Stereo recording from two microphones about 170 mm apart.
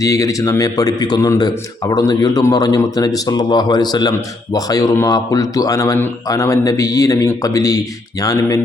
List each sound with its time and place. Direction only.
0.0 s speech: 20° left (ahead or behind)